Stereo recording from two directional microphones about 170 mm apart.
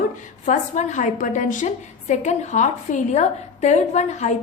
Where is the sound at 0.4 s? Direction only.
45° left (ahead or behind).